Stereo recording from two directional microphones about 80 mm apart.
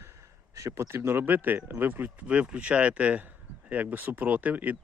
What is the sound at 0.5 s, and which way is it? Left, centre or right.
Speech, right.